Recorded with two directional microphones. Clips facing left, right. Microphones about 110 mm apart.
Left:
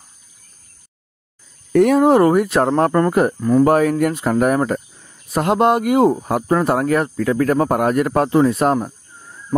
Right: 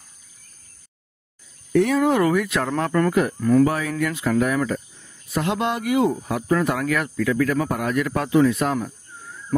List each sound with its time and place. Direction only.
1.7 s speech: 50° left (ahead or behind)
2.0 s speech: 40° left (ahead or behind)
3.3 s speech: 20° left (ahead or behind)
3.6 s speech: 50° left (ahead or behind)
8.7 s a sound: 30° left (ahead or behind)